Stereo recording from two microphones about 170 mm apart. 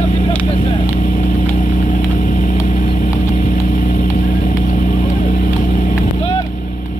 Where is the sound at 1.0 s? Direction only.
50° left (ahead or behind).